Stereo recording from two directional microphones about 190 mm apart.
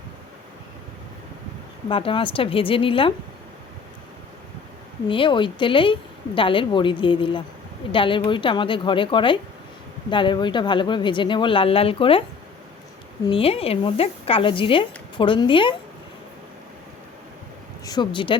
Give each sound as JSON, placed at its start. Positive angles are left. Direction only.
{"t": 1.9, "sound": "speech", "side_deg": 30}
{"t": 5.0, "sound": "speech", "side_deg": 25}
{"t": 13.2, "sound": "speech", "side_deg": 30}
{"t": 17.8, "sound": "speech", "side_deg": 20}